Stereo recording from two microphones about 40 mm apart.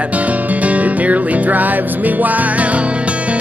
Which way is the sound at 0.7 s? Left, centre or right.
Right.